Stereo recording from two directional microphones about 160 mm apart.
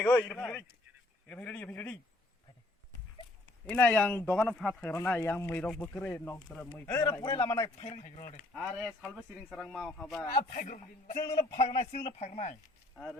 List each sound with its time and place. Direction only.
0.0 s speech: 15° left (ahead or behind)
3.7 s speech: 10° left (ahead or behind)
6.8 s a man's voice: 20° left (ahead or behind)
7.9 s a man's voice: 45° left (ahead or behind)
8.5 s speech: 5° left (ahead or behind)
10.5 s a man's voice: 55° left (ahead or behind)
11.3 s a man's voice: 40° left (ahead or behind)